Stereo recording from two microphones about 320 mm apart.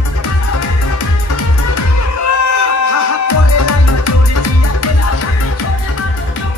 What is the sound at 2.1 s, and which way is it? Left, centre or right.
Music, left.